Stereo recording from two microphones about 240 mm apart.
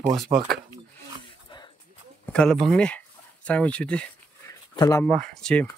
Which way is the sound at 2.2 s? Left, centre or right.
Centre.